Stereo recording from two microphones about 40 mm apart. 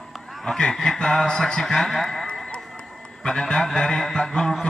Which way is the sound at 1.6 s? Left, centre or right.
Centre.